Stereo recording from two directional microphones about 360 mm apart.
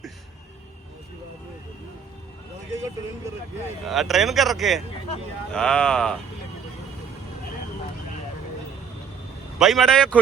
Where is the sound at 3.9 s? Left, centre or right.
Centre.